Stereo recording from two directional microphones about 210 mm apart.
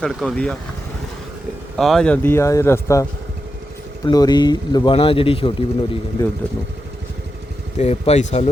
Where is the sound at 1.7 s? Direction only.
Centre (ahead or behind).